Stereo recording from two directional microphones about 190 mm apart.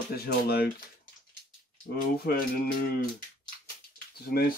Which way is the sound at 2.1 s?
50° left (ahead or behind).